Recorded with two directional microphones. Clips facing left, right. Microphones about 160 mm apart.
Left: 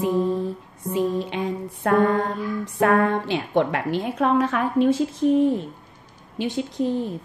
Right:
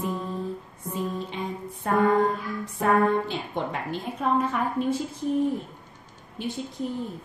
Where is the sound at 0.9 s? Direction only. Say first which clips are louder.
Left 7 dB; 80° left.